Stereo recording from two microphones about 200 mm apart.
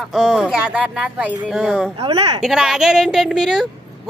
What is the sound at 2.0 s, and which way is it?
Speech, 30° right (ahead or behind).